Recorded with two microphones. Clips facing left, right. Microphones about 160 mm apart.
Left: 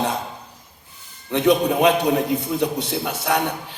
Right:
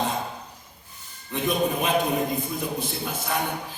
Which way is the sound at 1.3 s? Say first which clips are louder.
Left 7 dB; 75° left (ahead or behind).